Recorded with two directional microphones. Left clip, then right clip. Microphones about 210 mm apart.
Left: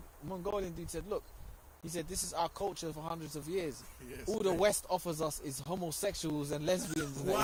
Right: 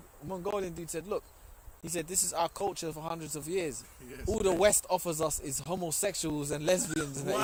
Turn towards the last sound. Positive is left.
turn(degrees=0)  # may be behind; listen again after turning